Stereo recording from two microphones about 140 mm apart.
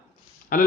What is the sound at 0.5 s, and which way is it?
Speech, 90° left.